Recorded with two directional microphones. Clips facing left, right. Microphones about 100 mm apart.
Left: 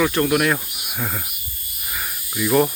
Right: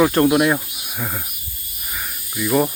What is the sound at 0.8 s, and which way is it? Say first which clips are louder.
Cricket: even; centre (ahead or behind).